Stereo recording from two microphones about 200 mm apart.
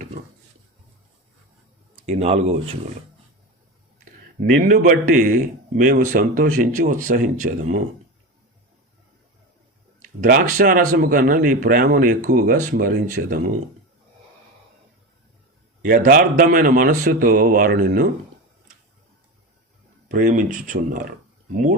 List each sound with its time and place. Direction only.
2.0 s speech: 30° right (ahead or behind)
4.4 s a man's voice: 40° right (ahead or behind)
10.2 s a man's voice: 45° right (ahead or behind)
15.8 s a man's voice: 45° right (ahead or behind)
20.1 s speech: 40° right (ahead or behind)